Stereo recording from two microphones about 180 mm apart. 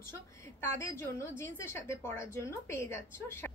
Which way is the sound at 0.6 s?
15° left (ahead or behind).